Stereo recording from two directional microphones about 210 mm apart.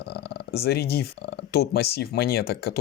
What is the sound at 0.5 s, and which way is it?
Speech, 50° left (ahead or behind).